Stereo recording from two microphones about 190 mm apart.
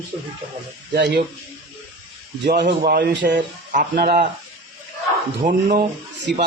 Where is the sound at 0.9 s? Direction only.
60° right (ahead or behind).